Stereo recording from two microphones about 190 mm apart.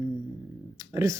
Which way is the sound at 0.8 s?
15° right (ahead or behind).